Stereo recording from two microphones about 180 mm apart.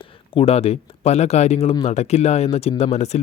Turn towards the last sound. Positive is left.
turn(degrees=40)  # may be behind; listen again after turning